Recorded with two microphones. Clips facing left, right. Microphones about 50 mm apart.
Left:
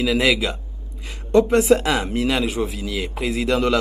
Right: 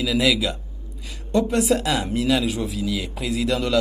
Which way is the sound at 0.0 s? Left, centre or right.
Left.